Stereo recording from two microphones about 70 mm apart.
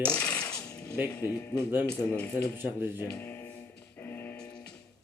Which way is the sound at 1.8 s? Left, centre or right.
Centre.